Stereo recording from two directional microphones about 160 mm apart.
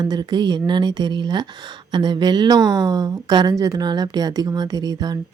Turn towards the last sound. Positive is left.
turn(degrees=-25)  # may be behind; listen again after turning